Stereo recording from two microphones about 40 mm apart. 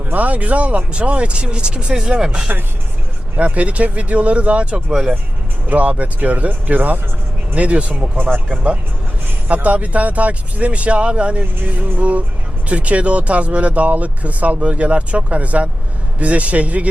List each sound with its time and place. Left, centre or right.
0.1 s speech: right
2.0 s speech: centre
3.3 s speech: right
7.5 s speech: right
11.6 s speech: right